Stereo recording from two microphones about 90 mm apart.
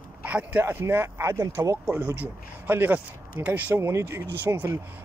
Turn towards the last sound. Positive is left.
turn(degrees=-25)  # may be behind; listen again after turning